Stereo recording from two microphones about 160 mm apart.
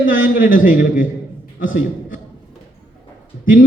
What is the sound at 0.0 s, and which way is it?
A man's voice, 55° left (ahead or behind).